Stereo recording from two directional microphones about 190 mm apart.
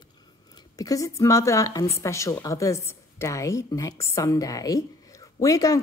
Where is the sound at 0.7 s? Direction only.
15° left (ahead or behind).